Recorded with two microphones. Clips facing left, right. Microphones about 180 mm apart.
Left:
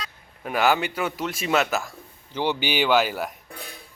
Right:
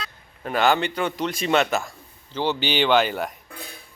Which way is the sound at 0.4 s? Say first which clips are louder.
Right 1 dB; 5° left (ahead or behind).